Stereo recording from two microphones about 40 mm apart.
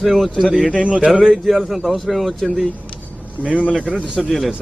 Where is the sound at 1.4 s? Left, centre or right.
Centre.